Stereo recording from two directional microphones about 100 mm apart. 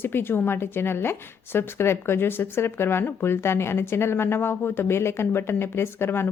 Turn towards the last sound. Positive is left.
turn(degrees=25)  # may be behind; listen again after turning